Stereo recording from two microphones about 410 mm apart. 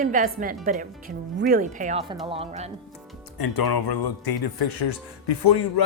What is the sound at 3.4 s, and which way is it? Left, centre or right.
Speech, left.